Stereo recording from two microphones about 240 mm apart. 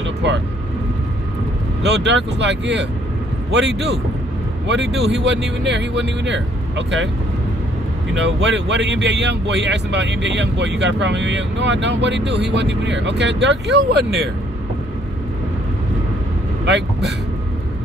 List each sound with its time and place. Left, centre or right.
0.0 s vehicle: right
1.8 s speech: right
8.1 s speech: right
16.6 s speech: right